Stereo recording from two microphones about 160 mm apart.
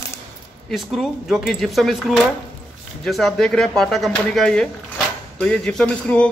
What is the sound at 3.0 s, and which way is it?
Speech, centre (ahead or behind).